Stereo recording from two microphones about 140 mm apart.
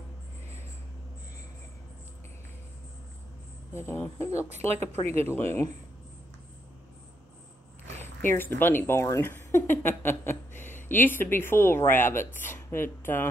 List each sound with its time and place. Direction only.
3.7 s a woman's voice: 15° left (ahead or behind)
8.2 s a woman's voice: 15° left (ahead or behind)